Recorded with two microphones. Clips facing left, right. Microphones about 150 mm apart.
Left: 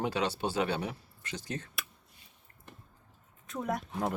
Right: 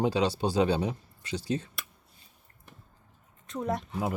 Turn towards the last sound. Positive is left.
turn(degrees=0)  # may be behind; listen again after turning